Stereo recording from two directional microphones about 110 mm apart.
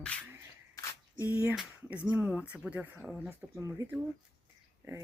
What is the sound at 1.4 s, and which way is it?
Speech, 10° right (ahead or behind).